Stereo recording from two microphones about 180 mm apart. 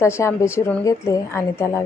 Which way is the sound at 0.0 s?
15° left (ahead or behind).